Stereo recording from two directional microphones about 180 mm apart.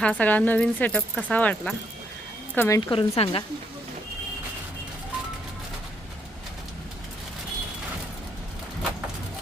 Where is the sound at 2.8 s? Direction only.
30° left (ahead or behind).